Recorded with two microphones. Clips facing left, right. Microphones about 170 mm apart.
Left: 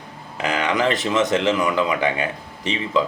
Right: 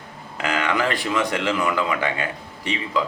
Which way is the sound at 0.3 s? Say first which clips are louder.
Left 2 dB; 20° left (ahead or behind).